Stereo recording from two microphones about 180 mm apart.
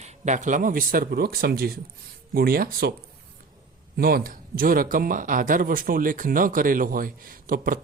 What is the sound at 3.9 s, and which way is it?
Speech, 55° right (ahead or behind).